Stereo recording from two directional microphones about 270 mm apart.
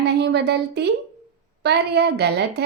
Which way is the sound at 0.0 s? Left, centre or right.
Right.